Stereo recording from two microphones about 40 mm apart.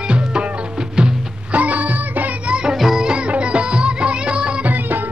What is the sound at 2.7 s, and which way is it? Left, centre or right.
Music, centre.